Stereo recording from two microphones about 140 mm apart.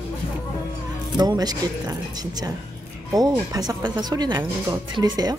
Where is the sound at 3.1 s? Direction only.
25° right (ahead or behind).